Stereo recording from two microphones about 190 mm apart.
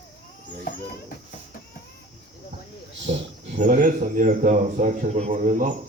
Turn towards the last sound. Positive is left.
turn(degrees=-45)  # may be behind; listen again after turning